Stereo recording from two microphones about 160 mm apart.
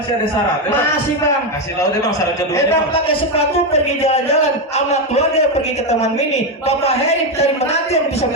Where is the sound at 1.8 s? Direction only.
20° left (ahead or behind).